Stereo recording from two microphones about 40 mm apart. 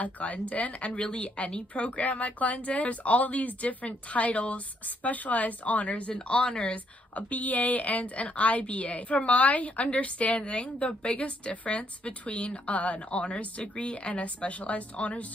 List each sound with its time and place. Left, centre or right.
0.0 s a woman's voice: left